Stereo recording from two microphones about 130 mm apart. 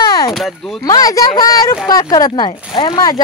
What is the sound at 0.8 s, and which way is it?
Speech, 30° left (ahead or behind).